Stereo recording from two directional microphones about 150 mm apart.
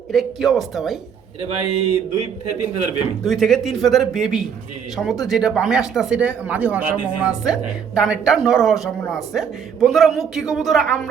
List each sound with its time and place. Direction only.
0.1 s speech: centre (ahead or behind)
1.4 s a man's voice: 40° right (ahead or behind)
3.2 s speech: centre (ahead or behind)